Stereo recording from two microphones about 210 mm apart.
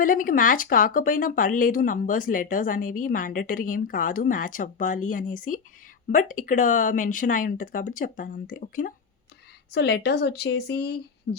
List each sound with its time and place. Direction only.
0.0 s a woman's voice: 40° left (ahead or behind)
9.7 s speech: 50° left (ahead or behind)